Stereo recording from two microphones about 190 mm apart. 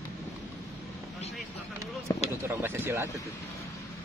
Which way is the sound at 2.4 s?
10° right (ahead or behind).